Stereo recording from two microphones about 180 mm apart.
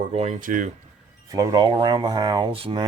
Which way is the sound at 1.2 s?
20° right (ahead or behind).